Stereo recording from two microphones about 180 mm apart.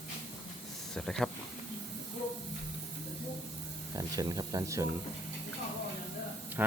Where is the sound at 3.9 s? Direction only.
20° right (ahead or behind).